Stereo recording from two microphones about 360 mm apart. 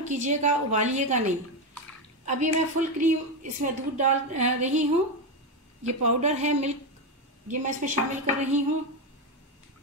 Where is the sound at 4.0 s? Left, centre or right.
Centre.